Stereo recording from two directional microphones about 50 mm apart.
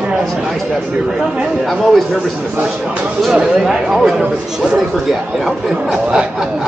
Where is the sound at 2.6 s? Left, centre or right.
Centre.